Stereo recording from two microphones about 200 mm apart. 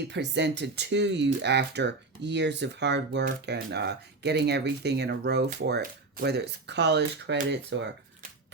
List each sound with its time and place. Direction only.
0.1 s speech: 60° right (ahead or behind)